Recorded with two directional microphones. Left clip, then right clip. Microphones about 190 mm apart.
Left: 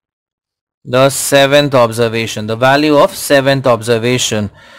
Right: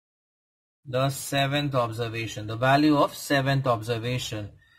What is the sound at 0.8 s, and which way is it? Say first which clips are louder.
Speech: left 17 dB; 45° left (ahead or behind).